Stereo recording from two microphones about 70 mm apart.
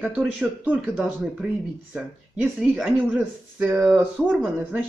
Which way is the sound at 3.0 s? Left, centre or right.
Right.